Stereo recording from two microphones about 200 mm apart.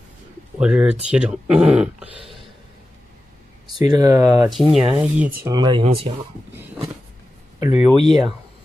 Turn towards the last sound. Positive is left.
turn(degrees=-5)  # may be behind; listen again after turning